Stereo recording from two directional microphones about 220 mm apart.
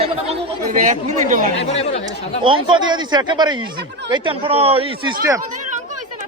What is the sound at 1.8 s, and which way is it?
Speech, 30° left (ahead or behind).